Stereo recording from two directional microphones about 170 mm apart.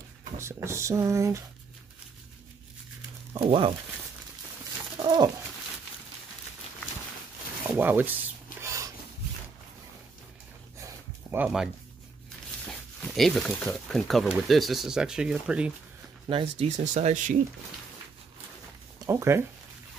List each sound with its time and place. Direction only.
0.4 s speech: 15° right (ahead or behind)
3.3 s speech: 30° right (ahead or behind)
4.9 s bird: 25° right (ahead or behind)
7.7 s speech: 10° right (ahead or behind)
8.6 s a sound: 15° right (ahead or behind)
11.3 s speech: 5° right (ahead or behind)
16.3 s speech: 35° right (ahead or behind)
18.9 s speech: 15° right (ahead or behind)